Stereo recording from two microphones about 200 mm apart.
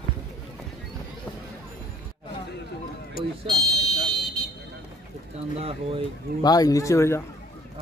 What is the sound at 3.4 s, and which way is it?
Fire alarm, centre (ahead or behind).